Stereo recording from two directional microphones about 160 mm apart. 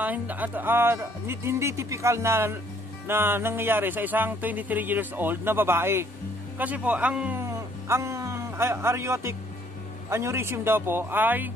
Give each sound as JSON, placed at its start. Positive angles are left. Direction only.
{"t": 0.0, "sound": "speech", "side_deg": -10}